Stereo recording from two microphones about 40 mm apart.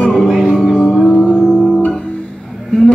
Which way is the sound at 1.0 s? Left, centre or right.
Left.